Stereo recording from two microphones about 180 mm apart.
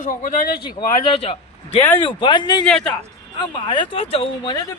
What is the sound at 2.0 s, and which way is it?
Speech, 30° left (ahead or behind).